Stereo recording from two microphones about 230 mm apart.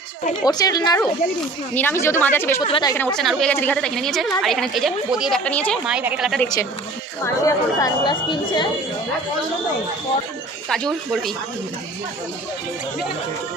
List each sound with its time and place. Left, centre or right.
0.4 s speech: centre
2.6 s a woman's voice: left
2.9 s a woman's voice: centre
6.4 s speech: centre
11.1 s a woman's voice: centre